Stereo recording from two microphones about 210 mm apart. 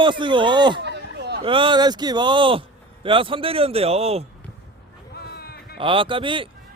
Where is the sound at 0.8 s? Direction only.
55° right (ahead or behind).